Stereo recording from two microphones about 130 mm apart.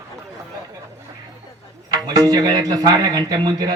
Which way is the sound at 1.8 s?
30° right (ahead or behind).